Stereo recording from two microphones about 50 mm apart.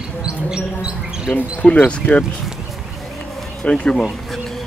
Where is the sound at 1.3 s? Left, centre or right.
Left.